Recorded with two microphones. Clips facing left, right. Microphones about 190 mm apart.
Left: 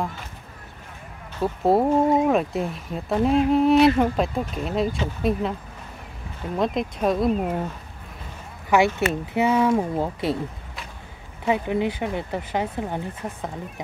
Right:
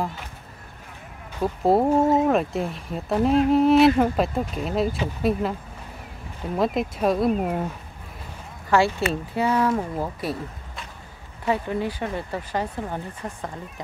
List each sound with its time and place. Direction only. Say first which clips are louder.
1.6 s speech: even; centre (ahead or behind)
6.5 s speech: right 1 dB; 5° right (ahead or behind)
8.6 s speech: left 1 dB; 20° left (ahead or behind)
11.4 s speech: left 2 dB; 15° left (ahead or behind)